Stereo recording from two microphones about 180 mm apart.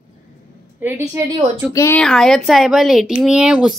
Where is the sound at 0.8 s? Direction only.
15° right (ahead or behind).